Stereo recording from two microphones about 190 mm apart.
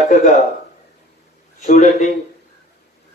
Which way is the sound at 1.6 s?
40° left (ahead or behind).